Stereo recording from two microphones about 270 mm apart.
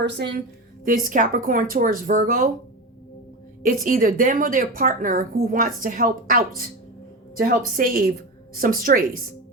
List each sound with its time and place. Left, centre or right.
0.0 s a woman's voice: right
3.6 s a woman's voice: right
7.8 s a woman's voice: right